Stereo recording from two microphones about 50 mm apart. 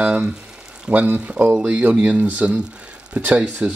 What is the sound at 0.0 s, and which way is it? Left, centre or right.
Speech, right.